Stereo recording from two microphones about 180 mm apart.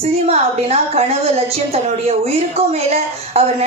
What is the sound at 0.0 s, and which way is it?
A woman's voice, 35° right (ahead or behind).